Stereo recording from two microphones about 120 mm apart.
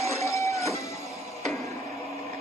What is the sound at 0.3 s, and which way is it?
Music, 25° left (ahead or behind).